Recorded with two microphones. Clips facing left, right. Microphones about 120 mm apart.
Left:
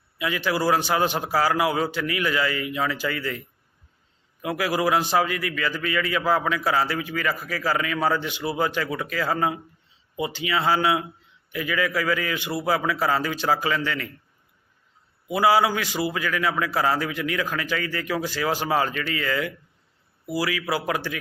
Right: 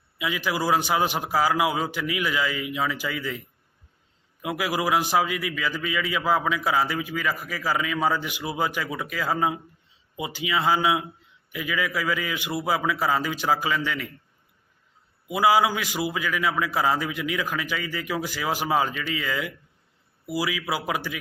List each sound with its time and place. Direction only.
0.2 s a man's voice: 10° right (ahead or behind)
4.4 s a man's voice: 10° right (ahead or behind)
15.3 s a man's voice: 10° right (ahead or behind)